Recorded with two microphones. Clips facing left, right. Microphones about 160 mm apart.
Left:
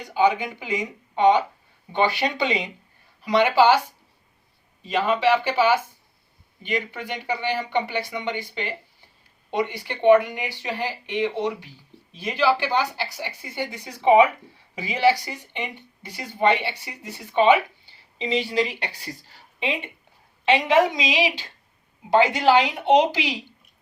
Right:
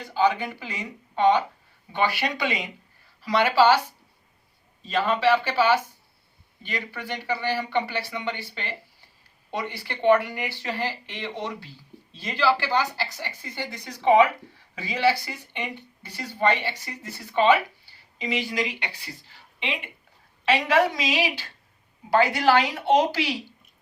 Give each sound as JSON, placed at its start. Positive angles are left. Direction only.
{"t": 0.0, "sound": "a woman's voice", "side_deg": 15}
{"t": 4.8, "sound": "speech", "side_deg": 15}
{"t": 20.4, "sound": "a woman's voice", "side_deg": 20}